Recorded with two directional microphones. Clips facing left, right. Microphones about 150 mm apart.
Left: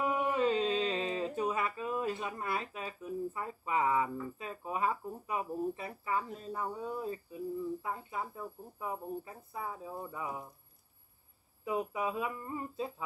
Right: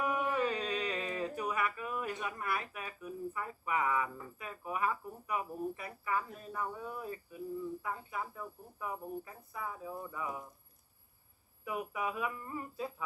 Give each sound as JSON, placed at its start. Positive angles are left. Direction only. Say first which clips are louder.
{"t": 0.0, "sound": "a sound", "louder": "left 2 dB", "side_deg": 20}
{"t": 7.8, "sound": "speech", "louder": "left 1 dB", "side_deg": 25}
{"t": 11.6, "sound": "speech", "louder": "left 3 dB", "side_deg": 25}